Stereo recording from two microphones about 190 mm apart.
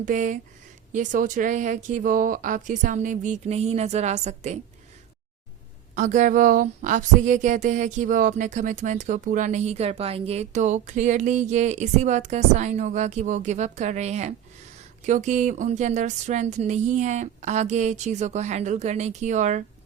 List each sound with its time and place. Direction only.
0.0 s speech: 45° right (ahead or behind)
5.9 s speech: 40° right (ahead or behind)